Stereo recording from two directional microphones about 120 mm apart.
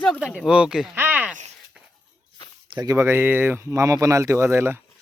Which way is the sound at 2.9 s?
20° right (ahead or behind).